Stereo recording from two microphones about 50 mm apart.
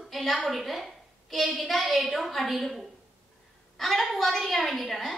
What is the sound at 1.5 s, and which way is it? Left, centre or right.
A woman's voice, centre.